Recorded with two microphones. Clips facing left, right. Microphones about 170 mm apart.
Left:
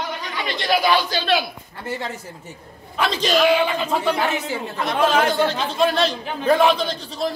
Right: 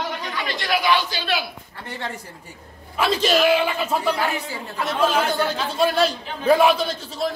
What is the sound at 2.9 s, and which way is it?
A man's voice, 5° right (ahead or behind).